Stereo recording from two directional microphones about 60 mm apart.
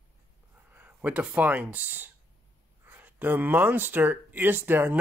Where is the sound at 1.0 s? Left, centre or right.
Right.